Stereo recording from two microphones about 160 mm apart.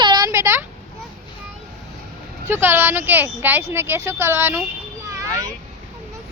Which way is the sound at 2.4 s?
15° right (ahead or behind).